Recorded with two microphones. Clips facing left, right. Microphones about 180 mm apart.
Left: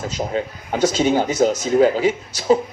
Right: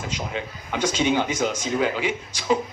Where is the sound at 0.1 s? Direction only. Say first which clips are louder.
Left 7 dB; 40° left (ahead or behind).